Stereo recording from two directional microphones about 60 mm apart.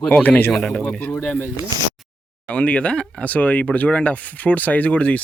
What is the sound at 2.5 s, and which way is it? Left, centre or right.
Speech, left.